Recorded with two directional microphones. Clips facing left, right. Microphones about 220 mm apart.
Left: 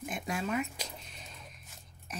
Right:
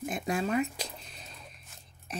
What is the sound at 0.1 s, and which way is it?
Speech, 35° right (ahead or behind).